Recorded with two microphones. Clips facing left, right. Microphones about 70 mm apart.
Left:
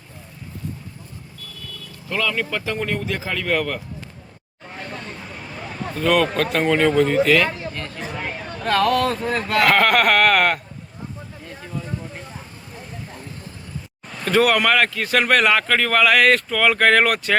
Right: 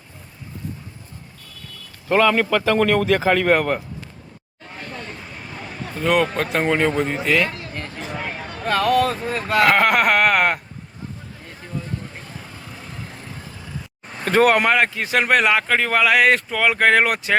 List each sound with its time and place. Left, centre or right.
2.0 s a man's voice: right
5.9 s a man's voice: centre
8.6 s speech: centre
12.9 s vehicle: right
14.1 s speech: right
14.7 s a man's voice: centre